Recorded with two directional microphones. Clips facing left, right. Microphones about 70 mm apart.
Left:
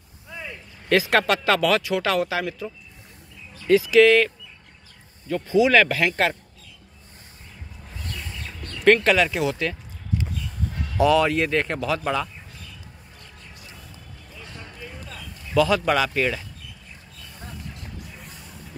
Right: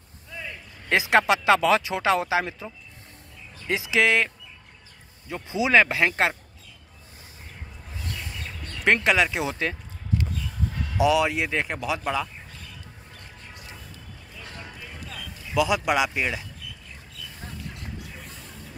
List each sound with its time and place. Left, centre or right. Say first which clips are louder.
0.8 s speech: left 1 dB; right
5.3 s speech: left 3 dB; right
8.8 s speech: left 4 dB; centre
11.0 s speech: left 3 dB; centre
15.1 s speech: left 4 dB; centre
18.2 s a sound: even; centre